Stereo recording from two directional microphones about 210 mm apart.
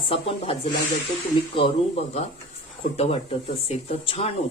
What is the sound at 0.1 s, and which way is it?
Speech, 25° left (ahead or behind).